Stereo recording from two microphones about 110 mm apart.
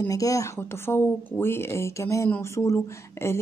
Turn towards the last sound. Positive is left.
turn(degrees=25)  # may be behind; listen again after turning